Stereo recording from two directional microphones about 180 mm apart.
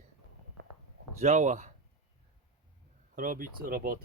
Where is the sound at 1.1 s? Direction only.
40° right (ahead or behind).